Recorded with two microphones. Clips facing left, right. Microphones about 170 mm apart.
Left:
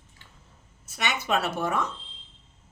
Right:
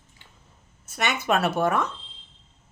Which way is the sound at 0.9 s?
50° right (ahead or behind).